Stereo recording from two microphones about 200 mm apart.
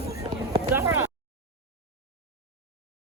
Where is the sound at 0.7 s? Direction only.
15° right (ahead or behind).